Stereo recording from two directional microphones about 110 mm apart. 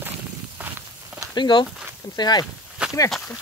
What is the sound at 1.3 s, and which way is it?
Speech, 45° left (ahead or behind).